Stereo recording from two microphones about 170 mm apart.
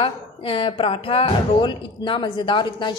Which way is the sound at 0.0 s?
30° left (ahead or behind).